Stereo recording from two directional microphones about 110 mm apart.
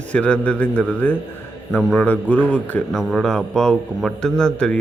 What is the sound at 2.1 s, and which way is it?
A man's voice, 15° left (ahead or behind).